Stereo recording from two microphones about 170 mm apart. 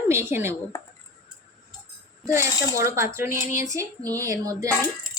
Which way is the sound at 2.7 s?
15° right (ahead or behind).